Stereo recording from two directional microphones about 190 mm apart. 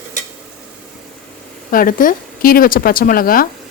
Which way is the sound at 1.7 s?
45° left (ahead or behind).